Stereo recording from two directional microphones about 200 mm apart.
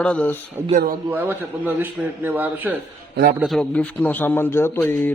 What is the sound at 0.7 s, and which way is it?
Speech, 45° right (ahead or behind).